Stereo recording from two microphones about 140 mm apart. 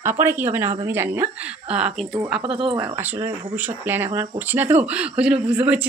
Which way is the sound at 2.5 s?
40° right (ahead or behind).